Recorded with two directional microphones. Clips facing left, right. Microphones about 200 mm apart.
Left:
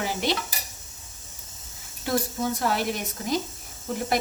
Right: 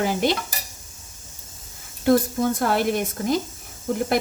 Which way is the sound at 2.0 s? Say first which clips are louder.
Right 8 dB; 55° right (ahead or behind).